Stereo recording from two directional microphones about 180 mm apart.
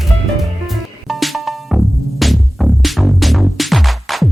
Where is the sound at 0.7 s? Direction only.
Centre (ahead or behind).